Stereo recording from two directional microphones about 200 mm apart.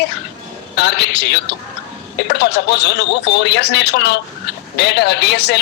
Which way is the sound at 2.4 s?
60° left (ahead or behind).